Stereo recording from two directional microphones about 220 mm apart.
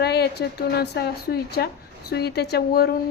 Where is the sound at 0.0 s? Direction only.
45° left (ahead or behind).